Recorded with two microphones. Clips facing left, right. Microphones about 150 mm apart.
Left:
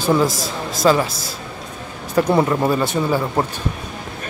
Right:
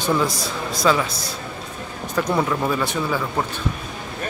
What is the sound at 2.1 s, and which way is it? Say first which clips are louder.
Speech: left 5 dB; 25° left (ahead or behind).